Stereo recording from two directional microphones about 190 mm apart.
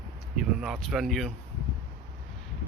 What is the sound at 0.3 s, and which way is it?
Speech, centre (ahead or behind).